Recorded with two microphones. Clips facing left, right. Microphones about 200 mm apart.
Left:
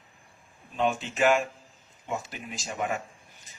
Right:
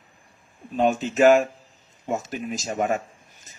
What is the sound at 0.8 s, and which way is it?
Speech, 40° right (ahead or behind).